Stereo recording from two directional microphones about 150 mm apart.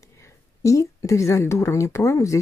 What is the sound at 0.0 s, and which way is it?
A woman's voice, 20° left (ahead or behind).